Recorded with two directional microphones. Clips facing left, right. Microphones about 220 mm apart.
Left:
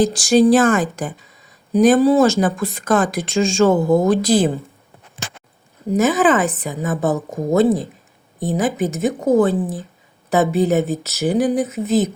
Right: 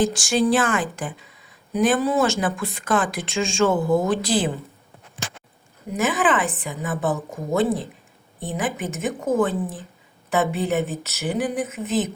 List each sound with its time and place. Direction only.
0.0 s speech: 40° left (ahead or behind)
5.9 s speech: 40° left (ahead or behind)